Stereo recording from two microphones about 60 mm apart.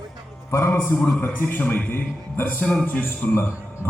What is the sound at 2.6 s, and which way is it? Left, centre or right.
Speech, centre.